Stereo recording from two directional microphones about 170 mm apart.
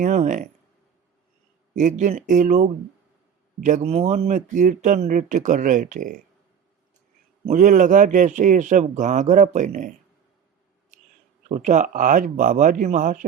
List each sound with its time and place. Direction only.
0.0 s speech: 45° right (ahead or behind)
1.7 s speech: 45° right (ahead or behind)
7.4 s speech: 45° right (ahead or behind)
10.9 s a sound: 45° right (ahead or behind)
11.4 s speech: 45° right (ahead or behind)